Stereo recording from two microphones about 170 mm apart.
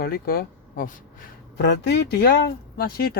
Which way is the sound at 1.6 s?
90° left.